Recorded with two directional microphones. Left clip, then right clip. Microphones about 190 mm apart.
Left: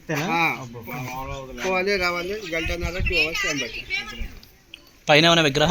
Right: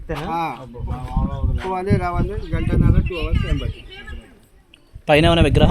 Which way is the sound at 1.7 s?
35° right (ahead or behind).